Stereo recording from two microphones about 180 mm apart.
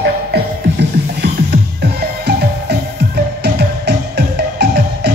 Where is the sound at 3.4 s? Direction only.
65° right (ahead or behind).